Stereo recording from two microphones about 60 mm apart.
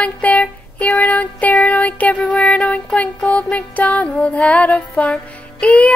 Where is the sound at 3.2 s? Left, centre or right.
Centre.